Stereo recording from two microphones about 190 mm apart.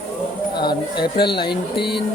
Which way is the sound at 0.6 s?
25° left (ahead or behind).